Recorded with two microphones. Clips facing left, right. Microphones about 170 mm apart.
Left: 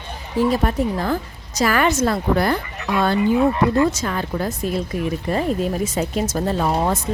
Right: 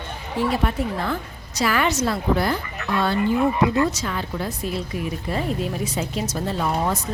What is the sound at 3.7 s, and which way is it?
Speech, 50° left (ahead or behind).